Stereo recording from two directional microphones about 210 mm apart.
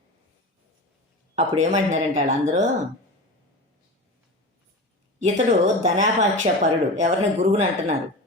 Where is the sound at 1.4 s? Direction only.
35° right (ahead or behind).